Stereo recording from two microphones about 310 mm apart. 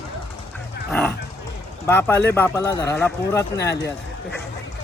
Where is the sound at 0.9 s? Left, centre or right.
Centre.